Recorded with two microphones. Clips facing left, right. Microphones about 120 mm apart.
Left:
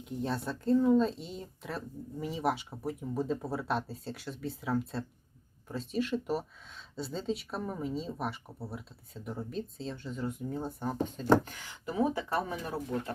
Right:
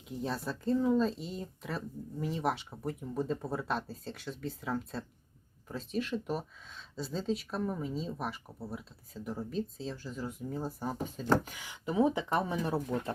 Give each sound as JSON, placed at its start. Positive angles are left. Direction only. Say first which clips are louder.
{"t": 0.0, "sound": "speech", "louder": "left 2 dB", "side_deg": 0}